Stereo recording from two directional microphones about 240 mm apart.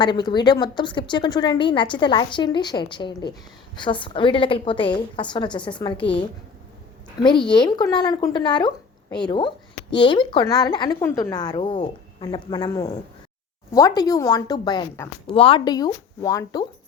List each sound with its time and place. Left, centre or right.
0.0 s a woman's voice: centre
7.2 s a woman's voice: centre